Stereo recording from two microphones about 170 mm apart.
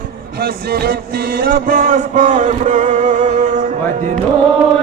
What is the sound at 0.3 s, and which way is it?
Music, 60° right (ahead or behind).